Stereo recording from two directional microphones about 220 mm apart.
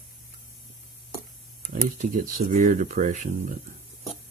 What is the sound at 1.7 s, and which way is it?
Speech, 35° right (ahead or behind).